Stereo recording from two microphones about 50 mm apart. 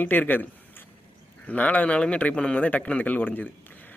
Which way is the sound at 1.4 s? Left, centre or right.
Left.